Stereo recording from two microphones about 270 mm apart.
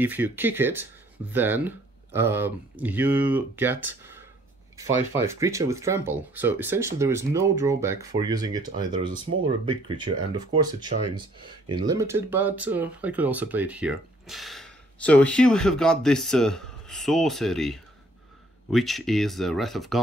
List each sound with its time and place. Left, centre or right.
0.0 s speech: centre